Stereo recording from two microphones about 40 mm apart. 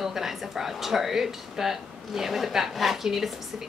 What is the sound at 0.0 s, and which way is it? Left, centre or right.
Speech, centre.